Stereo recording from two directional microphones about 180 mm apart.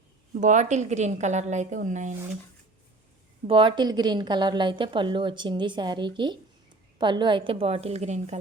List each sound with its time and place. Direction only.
0.3 s a woman's voice: 45° right (ahead or behind)
3.4 s a woman's voice: 30° right (ahead or behind)